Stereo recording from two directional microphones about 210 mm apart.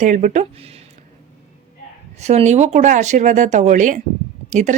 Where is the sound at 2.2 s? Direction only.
30° right (ahead or behind).